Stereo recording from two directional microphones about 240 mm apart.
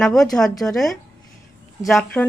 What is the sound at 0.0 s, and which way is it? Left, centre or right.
A woman's voice, centre.